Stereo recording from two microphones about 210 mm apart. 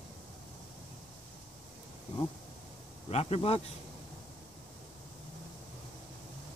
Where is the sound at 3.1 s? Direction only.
30° left (ahead or behind).